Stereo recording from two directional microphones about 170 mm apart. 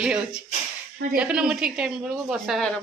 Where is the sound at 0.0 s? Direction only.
5° right (ahead or behind).